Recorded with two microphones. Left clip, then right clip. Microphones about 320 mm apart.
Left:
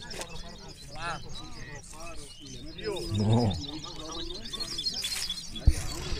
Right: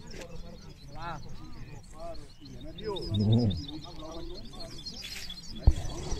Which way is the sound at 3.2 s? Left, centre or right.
Left.